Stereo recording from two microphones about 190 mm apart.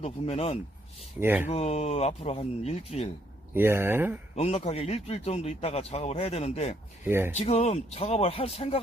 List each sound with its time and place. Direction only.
0.0 s a man's voice: 30° left (ahead or behind)
1.2 s speech: 10° right (ahead or behind)
1.5 s a man's voice: 35° left (ahead or behind)
3.5 s speech: 10° right (ahead or behind)
4.4 s a man's voice: 35° left (ahead or behind)
7.0 s speech: 10° right (ahead or behind)
7.3 s a man's voice: 35° left (ahead or behind)